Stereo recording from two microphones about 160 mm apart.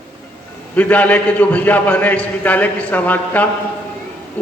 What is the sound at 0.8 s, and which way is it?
A man's voice, 10° left (ahead or behind).